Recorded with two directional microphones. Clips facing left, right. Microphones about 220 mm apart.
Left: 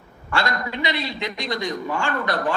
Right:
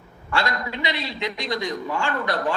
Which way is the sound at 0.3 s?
50° left (ahead or behind).